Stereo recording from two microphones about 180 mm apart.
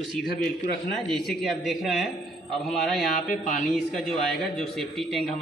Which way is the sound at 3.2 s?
45° left (ahead or behind).